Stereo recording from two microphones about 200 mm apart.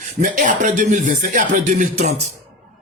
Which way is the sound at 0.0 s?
40° right (ahead or behind).